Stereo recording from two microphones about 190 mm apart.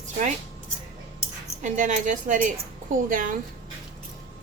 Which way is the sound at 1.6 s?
40° right (ahead or behind).